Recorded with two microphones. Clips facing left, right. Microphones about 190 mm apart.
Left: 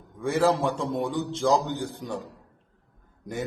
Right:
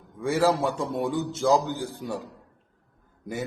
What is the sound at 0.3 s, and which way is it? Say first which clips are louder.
A man's voice: even; centre (ahead or behind).